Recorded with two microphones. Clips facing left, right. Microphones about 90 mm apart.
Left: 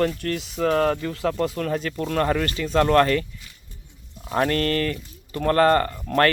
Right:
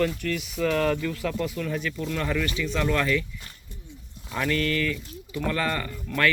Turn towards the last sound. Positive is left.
turn(degrees=50)  # may be behind; listen again after turning